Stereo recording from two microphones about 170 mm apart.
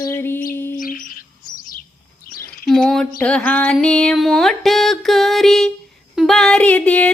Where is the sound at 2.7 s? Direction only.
5° left (ahead or behind).